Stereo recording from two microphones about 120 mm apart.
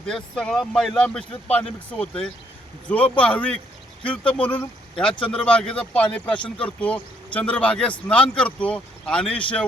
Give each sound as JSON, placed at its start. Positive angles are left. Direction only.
{"t": 0.0, "sound": "speech", "side_deg": 5}